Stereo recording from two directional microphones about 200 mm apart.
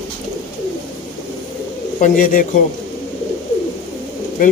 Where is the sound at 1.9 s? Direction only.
45° left (ahead or behind).